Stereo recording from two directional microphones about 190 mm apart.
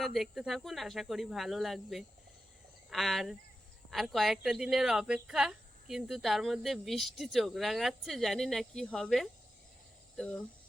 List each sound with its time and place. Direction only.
0.0 s speech: centre (ahead or behind)